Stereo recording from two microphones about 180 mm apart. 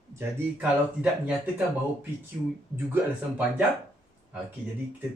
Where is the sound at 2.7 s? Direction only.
10° right (ahead or behind).